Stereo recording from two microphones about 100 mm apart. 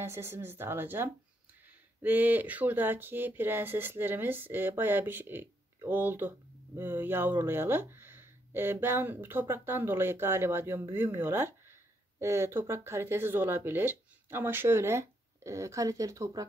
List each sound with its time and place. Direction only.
0.0 s speech: 25° right (ahead or behind)